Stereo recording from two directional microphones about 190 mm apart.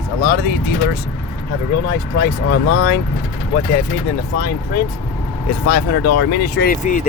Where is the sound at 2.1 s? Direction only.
60° left (ahead or behind).